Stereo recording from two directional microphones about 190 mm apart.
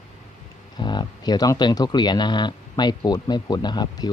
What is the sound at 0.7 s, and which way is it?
Speech, 25° left (ahead or behind).